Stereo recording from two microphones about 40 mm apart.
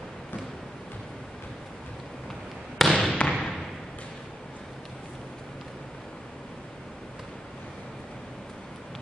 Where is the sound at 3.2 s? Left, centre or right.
Left.